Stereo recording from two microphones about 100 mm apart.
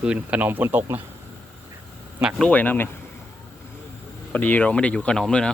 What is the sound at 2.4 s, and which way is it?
Speech, 15° left (ahead or behind).